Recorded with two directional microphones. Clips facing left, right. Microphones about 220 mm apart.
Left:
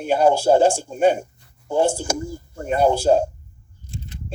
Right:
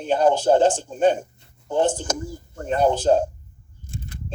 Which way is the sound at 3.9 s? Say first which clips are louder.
Even; 50° right (ahead or behind).